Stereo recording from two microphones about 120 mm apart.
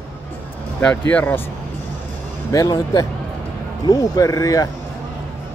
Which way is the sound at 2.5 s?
30° left (ahead or behind).